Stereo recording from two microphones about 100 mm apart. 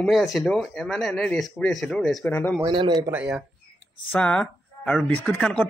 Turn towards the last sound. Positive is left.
turn(degrees=10)  # may be behind; listen again after turning